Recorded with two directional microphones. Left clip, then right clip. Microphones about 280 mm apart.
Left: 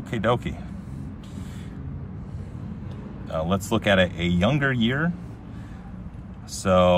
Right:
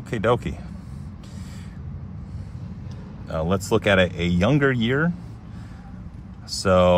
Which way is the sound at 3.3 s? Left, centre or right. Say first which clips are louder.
Right 3 dB; right.